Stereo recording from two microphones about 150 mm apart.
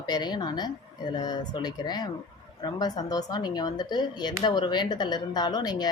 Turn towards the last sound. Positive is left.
turn(degrees=25)  # may be behind; listen again after turning